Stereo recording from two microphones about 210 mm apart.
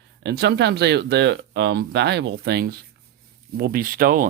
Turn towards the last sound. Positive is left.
turn(degrees=-45)  # may be behind; listen again after turning